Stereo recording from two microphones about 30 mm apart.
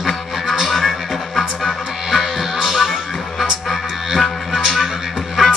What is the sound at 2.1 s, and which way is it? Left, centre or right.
Music, centre.